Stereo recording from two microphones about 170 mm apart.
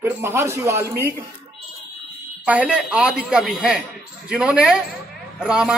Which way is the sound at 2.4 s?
10° right (ahead or behind).